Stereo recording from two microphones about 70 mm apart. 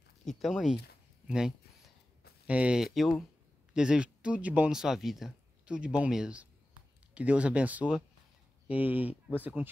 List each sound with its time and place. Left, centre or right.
0.2 s speech: centre
0.5 s speech: centre
2.8 s speech: centre
3.7 s speech: centre
4.6 s speech: centre
5.7 s speech: centre